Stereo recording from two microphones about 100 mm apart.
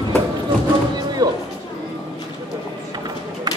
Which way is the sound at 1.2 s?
45° right (ahead or behind).